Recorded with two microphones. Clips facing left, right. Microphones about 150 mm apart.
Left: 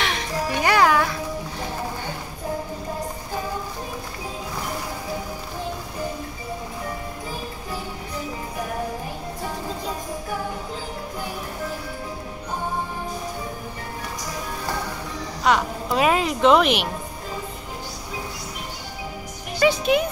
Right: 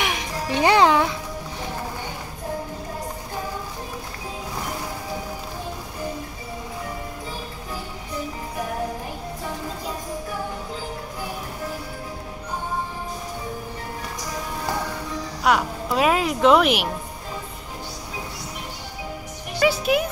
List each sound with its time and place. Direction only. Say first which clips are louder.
0.0 s music: left 1 dB; 15° right (ahead or behind)
15.4 s music: even; 5° right (ahead or behind)
19.6 s music: left 1 dB; 5° right (ahead or behind)